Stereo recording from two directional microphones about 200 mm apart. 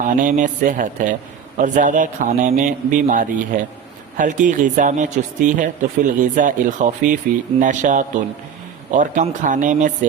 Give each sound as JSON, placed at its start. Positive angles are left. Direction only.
{"t": 0.0, "sound": "speech", "side_deg": -40}